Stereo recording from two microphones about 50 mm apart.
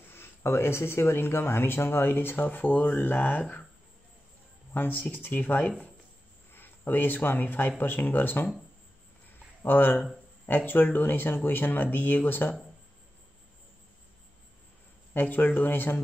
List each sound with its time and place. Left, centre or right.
0.1 s speech: left
4.7 s speech: left
9.6 s speech: left
15.1 s speech: left